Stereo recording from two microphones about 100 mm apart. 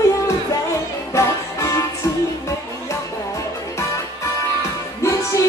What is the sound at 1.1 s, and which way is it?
Music, 30° left (ahead or behind).